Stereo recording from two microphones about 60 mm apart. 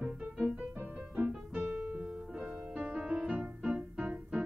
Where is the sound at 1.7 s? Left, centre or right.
Right.